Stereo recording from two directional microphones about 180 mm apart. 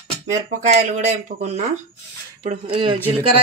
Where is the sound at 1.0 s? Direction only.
40° right (ahead or behind).